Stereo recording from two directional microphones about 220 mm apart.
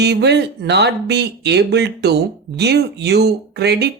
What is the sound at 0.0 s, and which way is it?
Speech, 50° right (ahead or behind).